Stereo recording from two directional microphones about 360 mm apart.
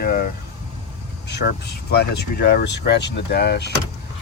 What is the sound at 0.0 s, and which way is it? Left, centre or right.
Vehicle, left.